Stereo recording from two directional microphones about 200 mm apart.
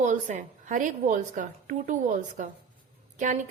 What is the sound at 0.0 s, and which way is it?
A woman's voice, 40° right (ahead or behind).